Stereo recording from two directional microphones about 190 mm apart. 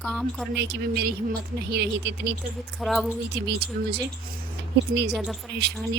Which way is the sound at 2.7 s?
Centre (ahead or behind).